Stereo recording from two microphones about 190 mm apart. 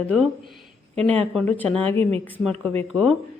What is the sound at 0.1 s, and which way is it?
Speech, centre (ahead or behind).